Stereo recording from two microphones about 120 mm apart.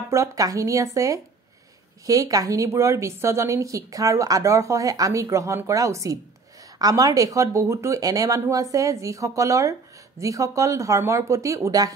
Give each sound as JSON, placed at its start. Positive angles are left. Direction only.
{"t": 0.1, "sound": "a woman's voice", "side_deg": -25}